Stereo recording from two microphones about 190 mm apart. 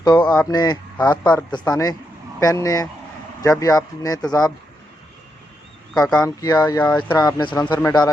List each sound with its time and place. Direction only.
0.0 s speech: 20° left (ahead or behind)
0.9 s speech: 5° left (ahead or behind)
1.5 s speech: 20° left (ahead or behind)
5.9 s speech: 5° left (ahead or behind)
6.2 s speech: 15° left (ahead or behind)